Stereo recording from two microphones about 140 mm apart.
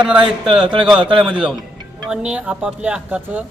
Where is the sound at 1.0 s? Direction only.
35° right (ahead or behind).